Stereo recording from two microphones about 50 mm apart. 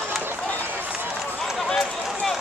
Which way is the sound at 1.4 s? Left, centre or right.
Centre.